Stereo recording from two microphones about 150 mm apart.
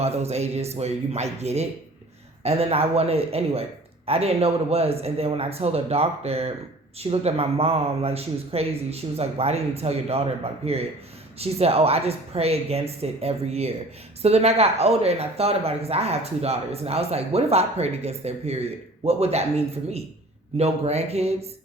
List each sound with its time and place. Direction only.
0.0 s speech: 45° right (ahead or behind)